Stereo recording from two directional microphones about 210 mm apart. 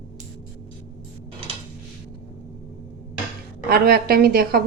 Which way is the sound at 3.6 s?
45° right (ahead or behind).